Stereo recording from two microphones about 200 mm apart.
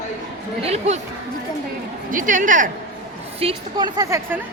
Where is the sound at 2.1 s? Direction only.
40° right (ahead or behind).